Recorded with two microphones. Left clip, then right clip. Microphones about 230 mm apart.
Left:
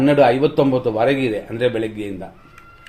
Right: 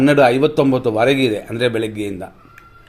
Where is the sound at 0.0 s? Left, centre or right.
Right.